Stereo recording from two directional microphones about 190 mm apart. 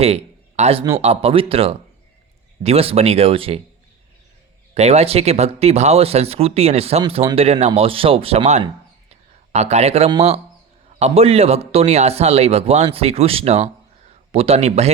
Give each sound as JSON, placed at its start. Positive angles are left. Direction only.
{"t": 0.0, "sound": "speech", "side_deg": -35}
{"t": 4.7, "sound": "speech", "side_deg": -35}
{"t": 8.6, "sound": "a sound", "side_deg": -35}
{"t": 10.1, "sound": "speech", "side_deg": -30}